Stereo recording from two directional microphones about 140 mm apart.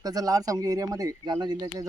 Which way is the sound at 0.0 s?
25° right (ahead or behind).